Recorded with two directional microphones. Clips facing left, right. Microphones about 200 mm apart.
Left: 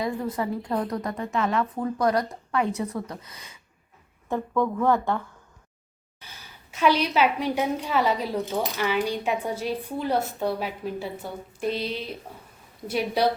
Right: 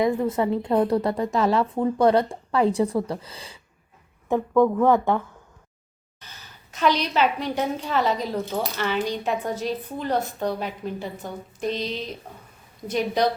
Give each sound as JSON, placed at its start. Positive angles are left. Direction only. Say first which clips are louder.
{"t": 0.0, "sound": "a woman's voice", "louder": "right 6 dB", "side_deg": -25}
{"t": 4.3, "sound": "a woman's voice", "louder": "right 6 dB", "side_deg": -15}
{"t": 6.1, "sound": "a woman's voice", "louder": "even", "side_deg": 10}